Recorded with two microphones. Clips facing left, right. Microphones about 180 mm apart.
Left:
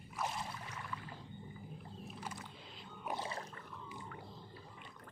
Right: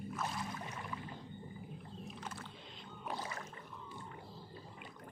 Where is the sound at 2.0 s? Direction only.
10° left (ahead or behind).